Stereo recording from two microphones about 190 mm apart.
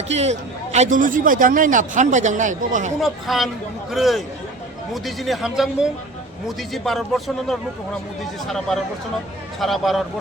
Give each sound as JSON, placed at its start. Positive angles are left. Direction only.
{"t": 0.1, "sound": "a man's voice", "side_deg": -35}
{"t": 3.0, "sound": "a man's voice", "side_deg": 0}